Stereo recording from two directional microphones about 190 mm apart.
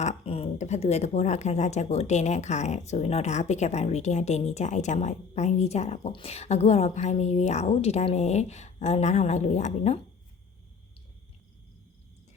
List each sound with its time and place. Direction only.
0.0 s speech: 35° left (ahead or behind)